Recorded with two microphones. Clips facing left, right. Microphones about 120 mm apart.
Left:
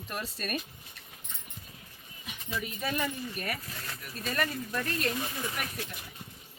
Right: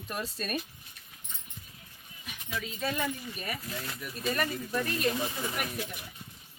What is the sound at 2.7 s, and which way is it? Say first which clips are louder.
Speech: right 1 dB; 10° left (ahead or behind).